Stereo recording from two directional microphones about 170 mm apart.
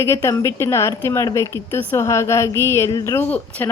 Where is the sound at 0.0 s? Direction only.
15° left (ahead or behind).